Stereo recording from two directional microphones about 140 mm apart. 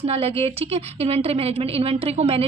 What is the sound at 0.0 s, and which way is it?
A woman's voice, 45° right (ahead or behind).